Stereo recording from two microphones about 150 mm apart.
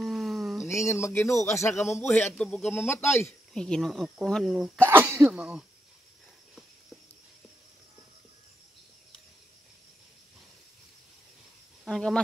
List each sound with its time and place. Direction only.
0.0 s a sound: centre (ahead or behind)
0.7 s a man's voice: 20° left (ahead or behind)
3.5 s speech: 5° left (ahead or behind)
4.8 s speech: 15° right (ahead or behind)
11.8 s speech: 5° left (ahead or behind)